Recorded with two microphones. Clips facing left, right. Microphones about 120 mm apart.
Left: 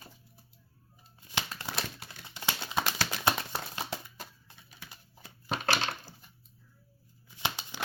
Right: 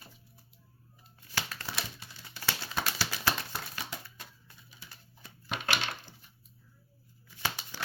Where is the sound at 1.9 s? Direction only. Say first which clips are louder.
Left 3 dB; 60° left (ahead or behind).